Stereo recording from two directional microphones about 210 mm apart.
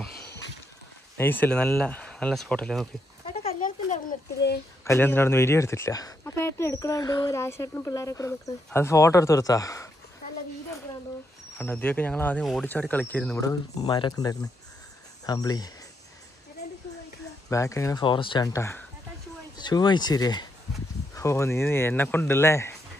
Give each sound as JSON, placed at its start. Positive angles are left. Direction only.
{"t": 1.1, "sound": "speech", "side_deg": 10}
{"t": 3.4, "sound": "a sound", "side_deg": 35}
{"t": 4.8, "sound": "speech", "side_deg": 10}
{"t": 11.5, "sound": "speech", "side_deg": 10}
{"t": 17.5, "sound": "speech", "side_deg": 15}